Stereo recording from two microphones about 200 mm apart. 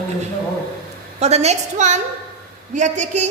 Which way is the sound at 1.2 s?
35° right (ahead or behind).